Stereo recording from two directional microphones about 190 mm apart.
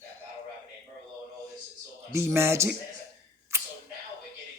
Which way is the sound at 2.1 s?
15° right (ahead or behind).